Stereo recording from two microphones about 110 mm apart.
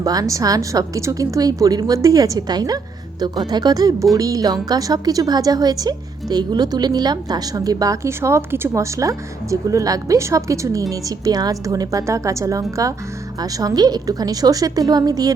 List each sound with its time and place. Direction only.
0.0 s speech: 35° right (ahead or behind)